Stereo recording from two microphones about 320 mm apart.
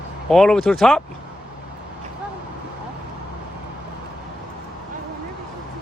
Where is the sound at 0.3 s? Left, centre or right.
Centre.